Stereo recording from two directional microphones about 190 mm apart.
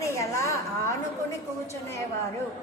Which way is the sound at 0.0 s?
15° left (ahead or behind).